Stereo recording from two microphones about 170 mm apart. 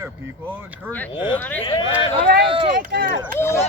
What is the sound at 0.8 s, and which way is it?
Speech, 10° left (ahead or behind).